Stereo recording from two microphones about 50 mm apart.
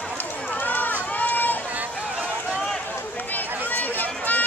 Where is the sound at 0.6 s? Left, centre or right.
Left.